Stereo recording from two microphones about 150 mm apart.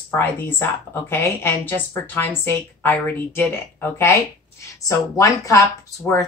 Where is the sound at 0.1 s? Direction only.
15° left (ahead or behind).